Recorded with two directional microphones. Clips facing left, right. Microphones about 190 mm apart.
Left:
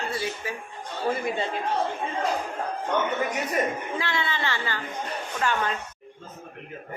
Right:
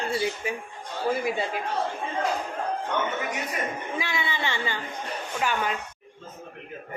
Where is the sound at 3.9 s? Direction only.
10° right (ahead or behind).